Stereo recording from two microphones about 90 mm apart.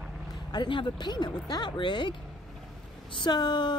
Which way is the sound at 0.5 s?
60° left (ahead or behind).